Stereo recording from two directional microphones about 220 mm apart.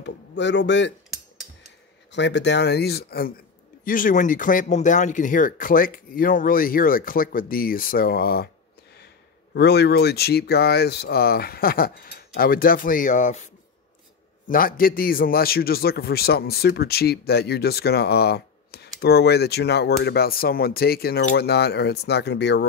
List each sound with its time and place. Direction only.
0.0 s a man's voice: 55° left (ahead or behind)
2.1 s a man's voice: 55° left (ahead or behind)
9.5 s a man's voice: 50° left (ahead or behind)
14.5 s a man's voice: 40° left (ahead or behind)